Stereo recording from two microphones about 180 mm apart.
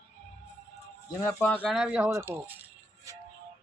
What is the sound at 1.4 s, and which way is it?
Speech, 5° left (ahead or behind).